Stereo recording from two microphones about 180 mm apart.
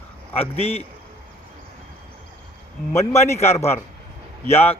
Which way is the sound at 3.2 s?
40° left (ahead or behind).